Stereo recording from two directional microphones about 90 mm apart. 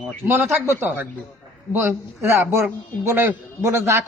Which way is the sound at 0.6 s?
25° right (ahead or behind).